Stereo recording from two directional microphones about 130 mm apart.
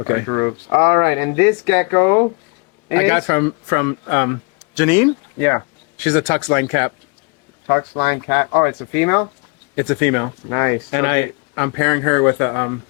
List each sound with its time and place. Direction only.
0.1 s speech: 25° left (ahead or behind)